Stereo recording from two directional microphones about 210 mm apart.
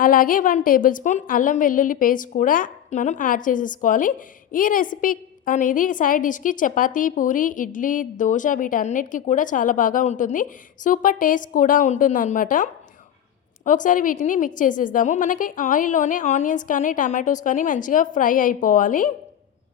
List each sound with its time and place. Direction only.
0.0 s a woman's voice: 40° left (ahead or behind)
13.7 s a woman's voice: 40° left (ahead or behind)